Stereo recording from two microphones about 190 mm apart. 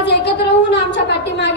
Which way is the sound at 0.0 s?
65° left (ahead or behind).